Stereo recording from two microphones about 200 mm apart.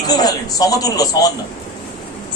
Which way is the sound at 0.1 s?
20° left (ahead or behind).